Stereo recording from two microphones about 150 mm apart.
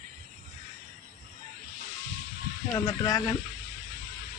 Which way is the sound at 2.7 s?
25° left (ahead or behind).